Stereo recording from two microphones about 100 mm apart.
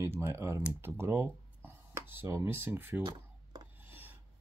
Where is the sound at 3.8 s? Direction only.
20° right (ahead or behind).